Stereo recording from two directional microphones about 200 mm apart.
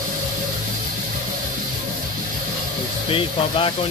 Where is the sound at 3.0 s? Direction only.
25° left (ahead or behind).